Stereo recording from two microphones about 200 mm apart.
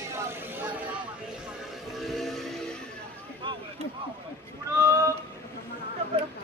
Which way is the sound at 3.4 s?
25° right (ahead or behind).